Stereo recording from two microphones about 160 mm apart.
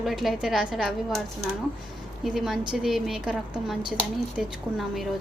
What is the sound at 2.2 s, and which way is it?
Speech, centre (ahead or behind).